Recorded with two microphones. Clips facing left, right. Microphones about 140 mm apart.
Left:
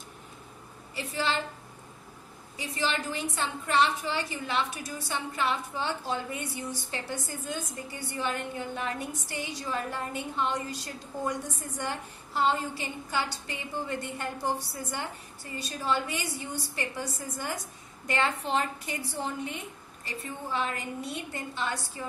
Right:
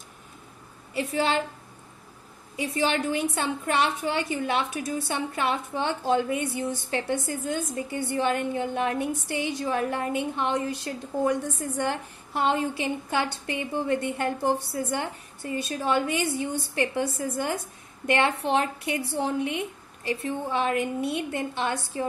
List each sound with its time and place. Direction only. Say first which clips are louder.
2.6 s a woman's voice: right 6 dB; 60° right (ahead or behind)
20.6 s a woman's voice: right 8 dB; 60° right (ahead or behind)